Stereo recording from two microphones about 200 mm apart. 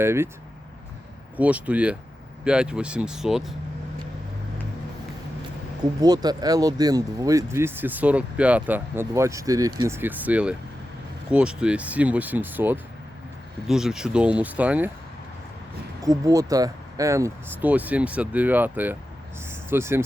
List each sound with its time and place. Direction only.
0.0 s speech: 10° right (ahead or behind)
1.4 s speech: 5° right (ahead or behind)
5.8 s speech: 20° right (ahead or behind)
16.0 s speech: 15° right (ahead or behind)
19.5 s a sound: 10° right (ahead or behind)